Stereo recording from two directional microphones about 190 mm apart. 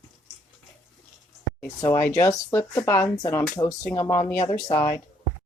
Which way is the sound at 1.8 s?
15° left (ahead or behind).